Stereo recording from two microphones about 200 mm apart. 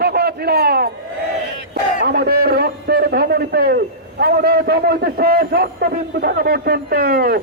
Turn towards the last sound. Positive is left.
turn(degrees=-50)  # may be behind; listen again after turning